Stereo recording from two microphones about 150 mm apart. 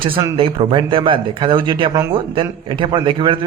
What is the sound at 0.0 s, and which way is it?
A man's voice, 35° right (ahead or behind).